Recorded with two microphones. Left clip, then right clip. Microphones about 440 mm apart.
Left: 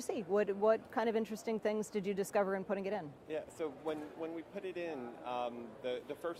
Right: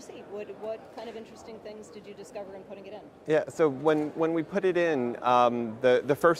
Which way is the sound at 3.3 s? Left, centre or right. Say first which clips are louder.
Right 17 dB; right.